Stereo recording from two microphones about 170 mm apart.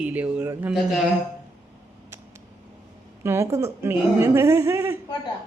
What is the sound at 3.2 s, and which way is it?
A woman's voice, 15° right (ahead or behind).